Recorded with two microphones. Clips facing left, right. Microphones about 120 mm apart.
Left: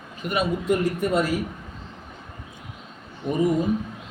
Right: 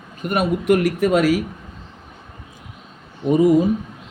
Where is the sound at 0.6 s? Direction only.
80° right.